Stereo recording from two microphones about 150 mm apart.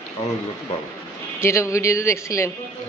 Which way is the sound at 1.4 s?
20° left (ahead or behind).